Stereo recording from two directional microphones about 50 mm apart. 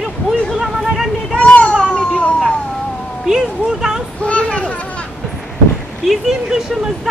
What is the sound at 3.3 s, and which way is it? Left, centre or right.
Speech, centre.